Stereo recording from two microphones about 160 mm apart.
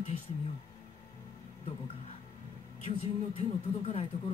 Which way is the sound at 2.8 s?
35° left (ahead or behind).